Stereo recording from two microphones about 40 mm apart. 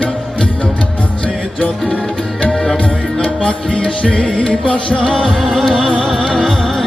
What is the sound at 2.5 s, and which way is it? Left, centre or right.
Tabla, centre.